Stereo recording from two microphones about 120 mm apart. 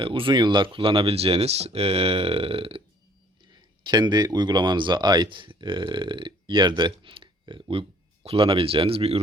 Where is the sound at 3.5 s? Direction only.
35° right (ahead or behind).